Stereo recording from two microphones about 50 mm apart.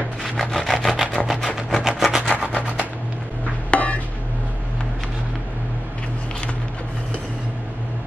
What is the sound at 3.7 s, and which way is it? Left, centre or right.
Chopping, left.